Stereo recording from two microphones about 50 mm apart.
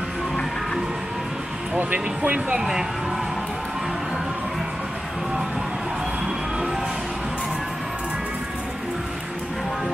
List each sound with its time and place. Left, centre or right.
1.8 s speech: right